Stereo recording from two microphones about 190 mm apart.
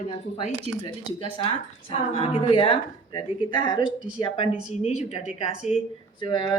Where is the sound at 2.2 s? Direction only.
25° left (ahead or behind).